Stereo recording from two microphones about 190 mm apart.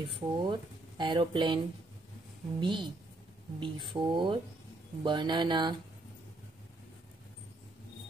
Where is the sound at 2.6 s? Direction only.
25° right (ahead or behind).